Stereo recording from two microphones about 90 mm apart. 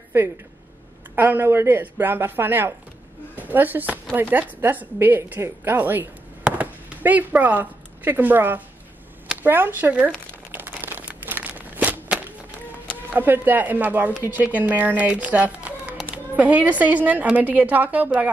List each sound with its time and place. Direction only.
1.1 s speech: 20° right (ahead or behind)
10.5 s a sound: 20° right (ahead or behind)
13.1 s a woman's voice: 20° right (ahead or behind)